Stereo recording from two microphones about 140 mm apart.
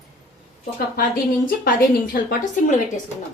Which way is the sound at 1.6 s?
90° left.